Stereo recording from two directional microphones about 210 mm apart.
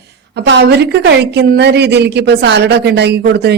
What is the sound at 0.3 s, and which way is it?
A man's voice, 55° right (ahead or behind).